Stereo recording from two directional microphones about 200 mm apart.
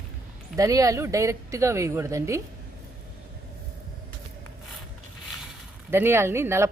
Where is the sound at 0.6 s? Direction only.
15° right (ahead or behind).